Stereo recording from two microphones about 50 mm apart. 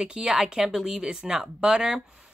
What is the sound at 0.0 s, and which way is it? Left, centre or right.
Speech, centre.